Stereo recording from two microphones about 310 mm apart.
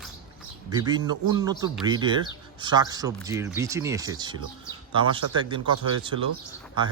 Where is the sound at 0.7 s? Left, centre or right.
Centre.